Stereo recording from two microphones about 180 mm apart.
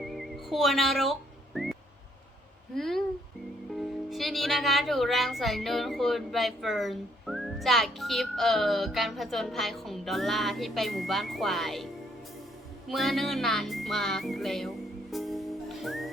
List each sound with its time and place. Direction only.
0.0 s music: centre (ahead or behind)
1.5 s a sound: centre (ahead or behind)
2.7 s speech: centre (ahead or behind)
3.8 s music: centre (ahead or behind)
12.9 s music: centre (ahead or behind)